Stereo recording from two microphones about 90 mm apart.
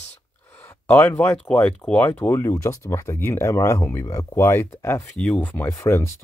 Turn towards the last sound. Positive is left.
turn(degrees=30)  # may be behind; listen again after turning